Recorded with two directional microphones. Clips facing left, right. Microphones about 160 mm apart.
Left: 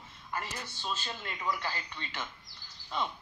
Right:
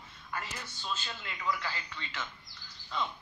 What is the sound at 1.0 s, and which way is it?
Speech, 40° left (ahead or behind).